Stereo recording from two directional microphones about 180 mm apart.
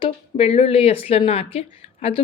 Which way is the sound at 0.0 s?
35° left (ahead or behind).